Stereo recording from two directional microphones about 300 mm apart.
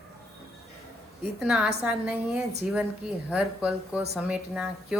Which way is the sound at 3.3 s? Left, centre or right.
Centre.